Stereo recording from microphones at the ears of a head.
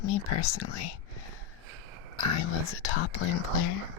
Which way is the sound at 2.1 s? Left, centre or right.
Left.